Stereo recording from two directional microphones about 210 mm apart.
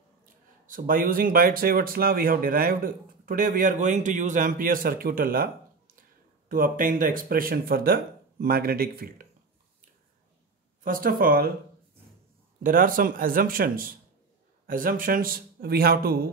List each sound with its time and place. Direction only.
0.2 s speech: 40° right (ahead or behind)
10.8 s speech: 40° right (ahead or behind)
12.6 s speech: 40° right (ahead or behind)